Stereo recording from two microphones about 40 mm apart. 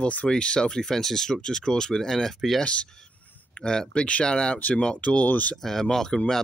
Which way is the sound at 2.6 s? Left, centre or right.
Left.